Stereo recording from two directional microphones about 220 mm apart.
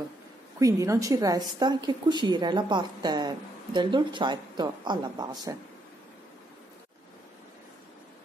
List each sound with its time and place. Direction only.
0.6 s a woman's voice: 15° right (ahead or behind)